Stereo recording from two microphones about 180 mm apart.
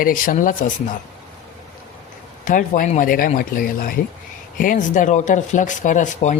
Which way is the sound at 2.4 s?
45° left (ahead or behind).